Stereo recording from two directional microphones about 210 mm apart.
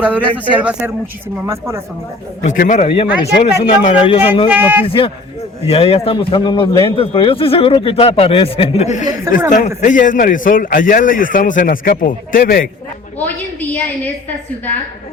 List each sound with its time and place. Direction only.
0.4 s speech: 5° right (ahead or behind)
2.4 s a man's voice: 35° left (ahead or behind)
4.4 s speech: 10° right (ahead or behind)
4.9 s a man's voice: 25° left (ahead or behind); by 12.6 s 45° left (ahead or behind)
13.1 s a woman's voice: 10° left (ahead or behind)